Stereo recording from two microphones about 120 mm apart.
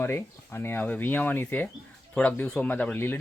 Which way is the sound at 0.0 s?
20° left (ahead or behind).